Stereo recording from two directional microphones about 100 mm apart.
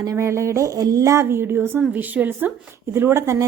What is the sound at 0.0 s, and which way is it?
Speech, 30° right (ahead or behind).